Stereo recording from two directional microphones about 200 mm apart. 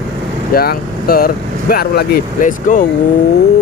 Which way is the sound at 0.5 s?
50° left (ahead or behind).